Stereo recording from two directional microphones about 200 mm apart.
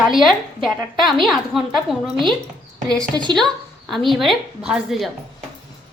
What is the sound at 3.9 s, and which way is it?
A woman's voice, centre (ahead or behind).